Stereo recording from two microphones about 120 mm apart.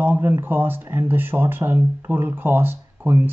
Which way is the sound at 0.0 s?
15° right (ahead or behind).